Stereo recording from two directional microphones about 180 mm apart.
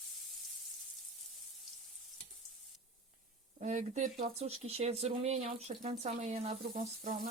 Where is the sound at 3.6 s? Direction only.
45° right (ahead or behind).